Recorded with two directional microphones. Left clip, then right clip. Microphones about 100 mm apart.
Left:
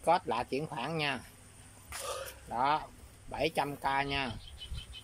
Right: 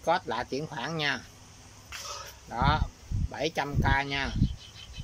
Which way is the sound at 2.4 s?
10° left (ahead or behind).